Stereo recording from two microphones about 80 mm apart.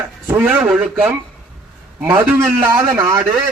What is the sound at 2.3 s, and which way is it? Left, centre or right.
Speech, right.